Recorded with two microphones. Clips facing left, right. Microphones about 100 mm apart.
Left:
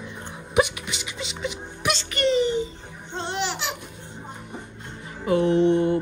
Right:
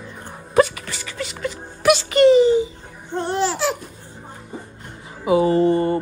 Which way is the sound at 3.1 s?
20° left (ahead or behind).